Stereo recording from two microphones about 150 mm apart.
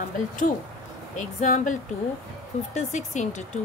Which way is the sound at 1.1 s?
60° left (ahead or behind).